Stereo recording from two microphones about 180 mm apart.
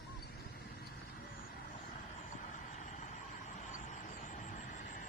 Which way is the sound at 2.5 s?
40° left (ahead or behind).